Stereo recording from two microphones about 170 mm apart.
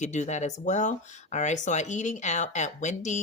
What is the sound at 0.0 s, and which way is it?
Speech, 45° left (ahead or behind).